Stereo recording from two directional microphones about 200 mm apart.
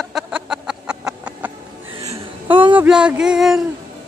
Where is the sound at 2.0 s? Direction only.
25° right (ahead or behind).